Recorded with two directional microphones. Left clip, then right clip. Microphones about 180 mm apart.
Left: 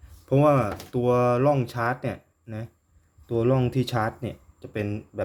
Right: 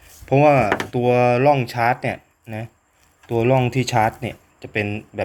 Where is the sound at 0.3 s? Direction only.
25° left (ahead or behind).